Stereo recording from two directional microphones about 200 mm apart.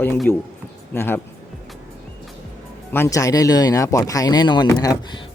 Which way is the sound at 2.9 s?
15° left (ahead or behind).